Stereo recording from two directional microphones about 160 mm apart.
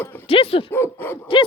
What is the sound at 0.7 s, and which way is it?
Speech, 15° left (ahead or behind).